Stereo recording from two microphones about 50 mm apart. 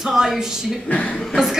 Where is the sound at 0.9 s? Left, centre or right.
Left.